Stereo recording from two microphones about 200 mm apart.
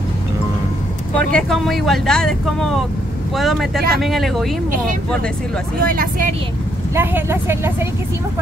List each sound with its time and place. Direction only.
1.1 s speech: 5° left (ahead or behind)
5.8 s speech: 45° right (ahead or behind)
7.0 s speech: 10° right (ahead or behind)